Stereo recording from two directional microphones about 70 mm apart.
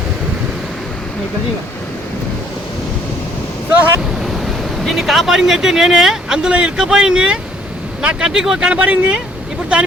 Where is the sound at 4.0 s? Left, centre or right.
Centre.